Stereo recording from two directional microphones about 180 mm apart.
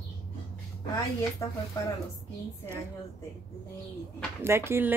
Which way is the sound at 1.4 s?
15° left (ahead or behind).